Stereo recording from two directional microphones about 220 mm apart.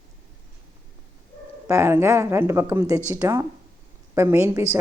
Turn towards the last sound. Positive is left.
turn(degrees=-10)  # may be behind; listen again after turning